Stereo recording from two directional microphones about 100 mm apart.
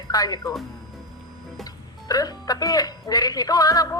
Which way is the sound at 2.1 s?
40° left (ahead or behind).